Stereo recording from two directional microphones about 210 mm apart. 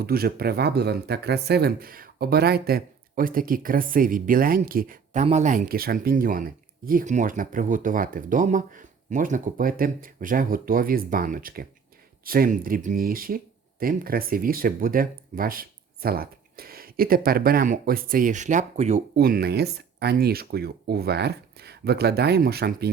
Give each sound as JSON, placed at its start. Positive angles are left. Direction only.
{"t": 0.0, "sound": "speech", "side_deg": -45}
{"t": 19.1, "sound": "speech", "side_deg": -45}